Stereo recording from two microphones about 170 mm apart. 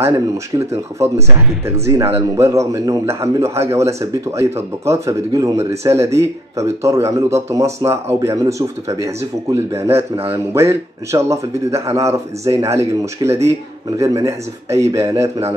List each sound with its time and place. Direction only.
0.6 s a man's voice: 15° right (ahead or behind)